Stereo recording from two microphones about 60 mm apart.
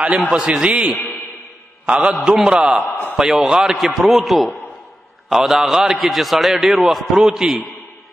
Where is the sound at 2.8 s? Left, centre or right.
Left.